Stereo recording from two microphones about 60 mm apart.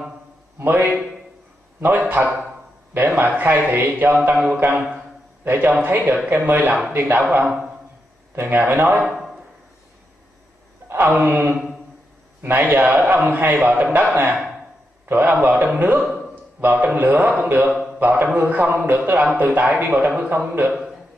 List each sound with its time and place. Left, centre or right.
0.7 s a man's voice: right
8.4 s a man's voice: right
10.9 s a man's voice: right
15.0 s a man's voice: right
16.0 s a man's voice: centre
16.6 s a man's voice: right
17.6 s a sound: centre
17.9 s a man's voice: right